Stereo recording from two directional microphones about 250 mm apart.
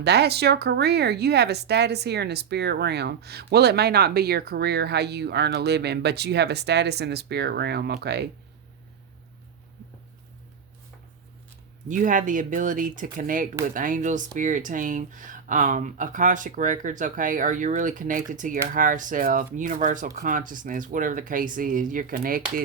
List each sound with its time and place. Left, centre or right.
0.0 s speech: right
11.9 s speech: right